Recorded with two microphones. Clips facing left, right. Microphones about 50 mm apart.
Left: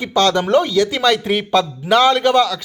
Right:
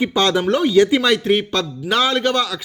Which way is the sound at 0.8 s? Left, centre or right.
Centre.